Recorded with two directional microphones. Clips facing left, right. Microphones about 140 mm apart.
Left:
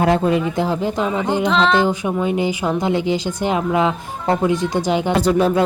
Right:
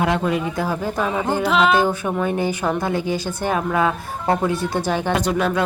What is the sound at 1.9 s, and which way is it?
Speech, 15° left (ahead or behind).